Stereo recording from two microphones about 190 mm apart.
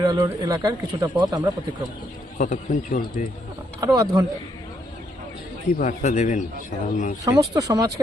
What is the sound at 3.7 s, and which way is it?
Speech, 20° right (ahead or behind).